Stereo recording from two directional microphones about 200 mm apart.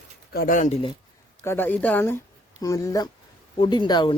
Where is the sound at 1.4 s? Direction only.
10° left (ahead or behind).